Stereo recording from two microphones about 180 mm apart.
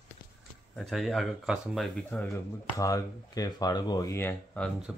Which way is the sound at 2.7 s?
20° left (ahead or behind).